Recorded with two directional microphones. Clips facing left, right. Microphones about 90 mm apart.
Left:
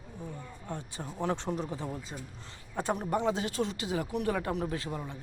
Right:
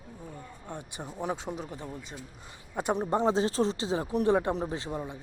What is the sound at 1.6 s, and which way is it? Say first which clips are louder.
Speech: left 3 dB; 20° left (ahead or behind).